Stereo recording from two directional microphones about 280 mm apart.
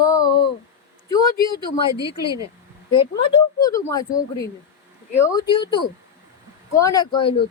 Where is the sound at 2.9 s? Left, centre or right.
Left.